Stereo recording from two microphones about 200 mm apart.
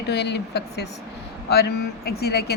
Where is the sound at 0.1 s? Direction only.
55° left (ahead or behind).